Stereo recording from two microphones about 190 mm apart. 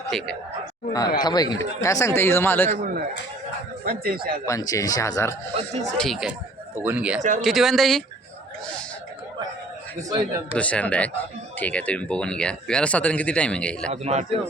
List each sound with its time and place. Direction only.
0.1 s speech: centre (ahead or behind)
1.2 s speech: 20° left (ahead or behind)
2.6 s speech: 50° right (ahead or behind)
4.4 s speech: 15° left (ahead or behind)
5.5 s speech: 35° right (ahead or behind)
6.0 s speech: centre (ahead or behind)
10.5 s speech: 5° left (ahead or behind)
13.9 s speech: 35° right (ahead or behind)